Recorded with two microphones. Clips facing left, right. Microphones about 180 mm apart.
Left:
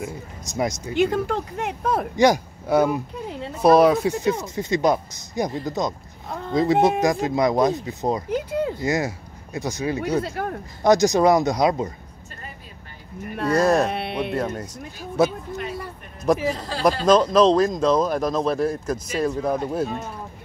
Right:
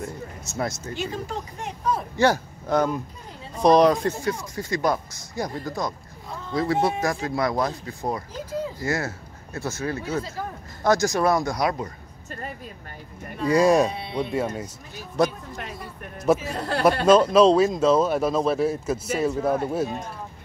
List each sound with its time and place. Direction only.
0.0 s speech: 15° left (ahead or behind)
0.9 s speech: 60° left (ahead or behind)
2.1 s speech: 15° left (ahead or behind)
3.3 s a sound: 70° left (ahead or behind)
3.6 s speech: 5° left (ahead or behind)
4.2 s speech: 20° left (ahead or behind)
8.3 s a sound: 65° left (ahead or behind)
8.8 s speech: 15° left (ahead or behind)
13.5 s speech: 10° right (ahead or behind)
13.8 s speech: 70° left (ahead or behind)
14.3 s speech: 10° right (ahead or behind)
15.2 s speech: 5° left (ahead or behind)
16.5 s speech: 65° right (ahead or behind)
17.0 s speech: 5° right (ahead or behind)